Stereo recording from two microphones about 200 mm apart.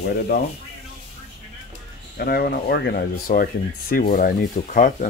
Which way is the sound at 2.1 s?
50° left (ahead or behind).